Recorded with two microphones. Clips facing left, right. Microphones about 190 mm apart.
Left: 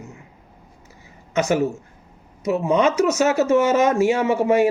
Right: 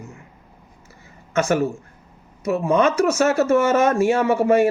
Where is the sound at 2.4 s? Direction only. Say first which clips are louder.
Even; 20° left (ahead or behind).